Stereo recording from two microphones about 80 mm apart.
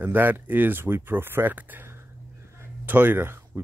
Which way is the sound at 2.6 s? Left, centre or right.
Right.